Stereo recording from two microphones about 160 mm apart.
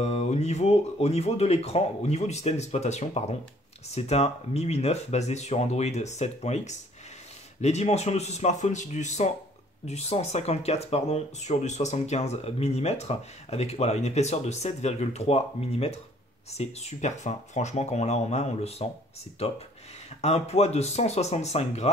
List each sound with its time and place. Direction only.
0.0 s speech: 40° left (ahead or behind)
20.2 s speech: 40° left (ahead or behind)